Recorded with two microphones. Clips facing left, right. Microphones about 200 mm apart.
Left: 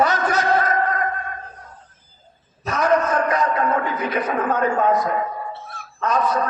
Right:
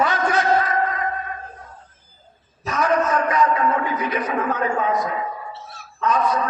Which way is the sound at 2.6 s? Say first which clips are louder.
Left 1 dB; 45° left (ahead or behind).